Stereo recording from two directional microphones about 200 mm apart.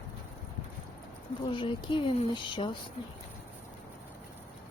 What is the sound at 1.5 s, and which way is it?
Speech, 25° left (ahead or behind).